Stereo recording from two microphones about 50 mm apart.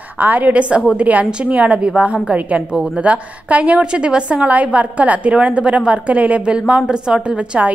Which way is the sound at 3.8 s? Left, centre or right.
Centre.